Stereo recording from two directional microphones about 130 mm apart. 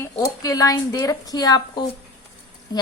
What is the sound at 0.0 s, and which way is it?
A woman's voice, 25° left (ahead or behind).